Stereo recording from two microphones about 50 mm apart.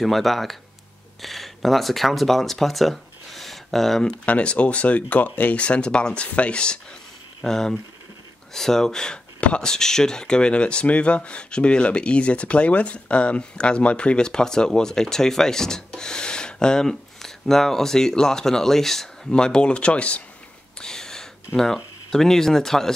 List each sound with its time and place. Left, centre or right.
0.0 s speech: centre
4.3 s speech: left
5.6 s speech: left
7.4 s speech: centre; by 20.2 s left
20.8 s a sound: centre
22.1 s speech: centre